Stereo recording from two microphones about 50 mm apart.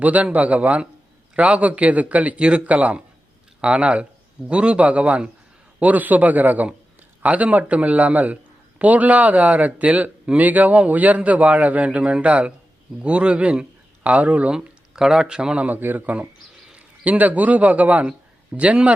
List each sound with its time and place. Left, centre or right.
0.0 s a man's voice: right
14.9 s speech: centre
15.4 s a man's voice: right